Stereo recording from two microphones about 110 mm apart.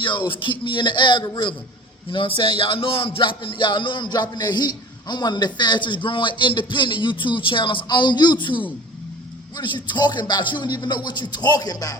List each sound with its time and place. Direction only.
0.0 s speech: 50° left (ahead or behind)
9.6 s music: 45° left (ahead or behind)